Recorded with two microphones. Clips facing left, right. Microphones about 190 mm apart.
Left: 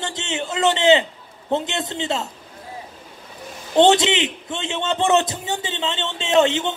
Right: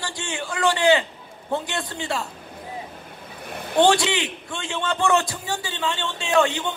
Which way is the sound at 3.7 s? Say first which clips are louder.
Left 3 dB; 20° left (ahead or behind).